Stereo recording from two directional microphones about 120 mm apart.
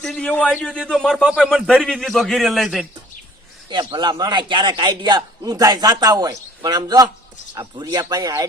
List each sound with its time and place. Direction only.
0.0 s a man's voice: 5° left (ahead or behind)
1.1 s a man's voice: 5° right (ahead or behind)
3.7 s a man's voice: 40° right (ahead or behind)